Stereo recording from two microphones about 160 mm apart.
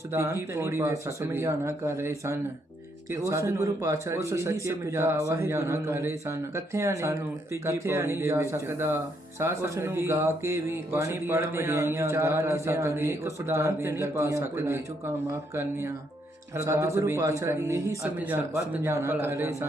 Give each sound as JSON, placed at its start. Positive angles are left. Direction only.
{"t": 0.1, "sound": "speech", "side_deg": -15}